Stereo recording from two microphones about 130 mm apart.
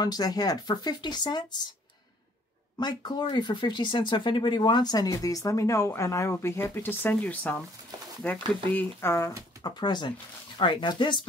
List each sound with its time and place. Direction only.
0.0 s speech: 30° left (ahead or behind)
2.8 s speech: 35° left (ahead or behind); by 7.6 s 10° left (ahead or behind)
8.7 s speech: 20° left (ahead or behind)
9.6 s speech: 35° left (ahead or behind)